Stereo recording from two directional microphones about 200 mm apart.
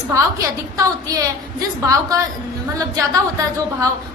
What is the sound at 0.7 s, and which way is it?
A woman's voice, 15° right (ahead or behind).